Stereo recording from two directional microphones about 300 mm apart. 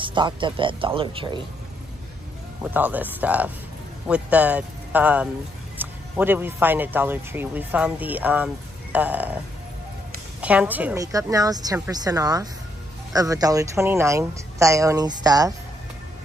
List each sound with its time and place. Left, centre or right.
0.0 s speech: centre
2.6 s speech: centre
10.4 s speech: centre